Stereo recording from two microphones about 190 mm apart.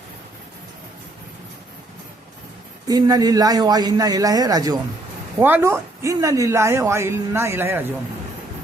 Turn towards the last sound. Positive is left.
turn(degrees=-10)  # may be behind; listen again after turning